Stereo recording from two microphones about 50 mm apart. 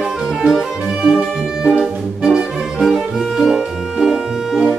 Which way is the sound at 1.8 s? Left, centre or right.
Centre.